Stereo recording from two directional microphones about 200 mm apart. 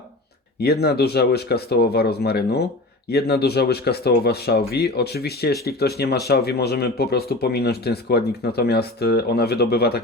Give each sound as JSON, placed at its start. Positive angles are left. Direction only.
{"t": 0.6, "sound": "speech", "side_deg": 55}